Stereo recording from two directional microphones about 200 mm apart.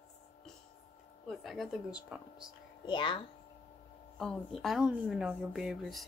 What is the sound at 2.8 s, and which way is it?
Speech, 25° left (ahead or behind).